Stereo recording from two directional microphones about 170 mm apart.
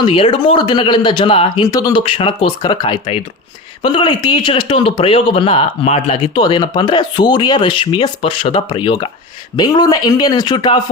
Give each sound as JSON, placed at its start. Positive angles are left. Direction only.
{"t": 0.0, "sound": "speech", "side_deg": 30}